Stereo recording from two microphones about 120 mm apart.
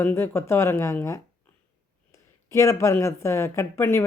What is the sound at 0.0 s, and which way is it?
Speech, 20° left (ahead or behind).